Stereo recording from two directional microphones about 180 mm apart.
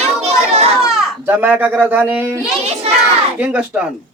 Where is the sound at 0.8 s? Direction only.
5° right (ahead or behind).